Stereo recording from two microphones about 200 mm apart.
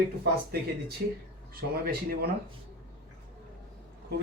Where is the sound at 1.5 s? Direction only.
50° right (ahead or behind).